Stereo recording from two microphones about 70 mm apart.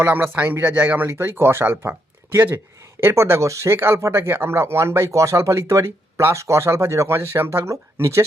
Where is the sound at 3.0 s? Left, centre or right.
Right.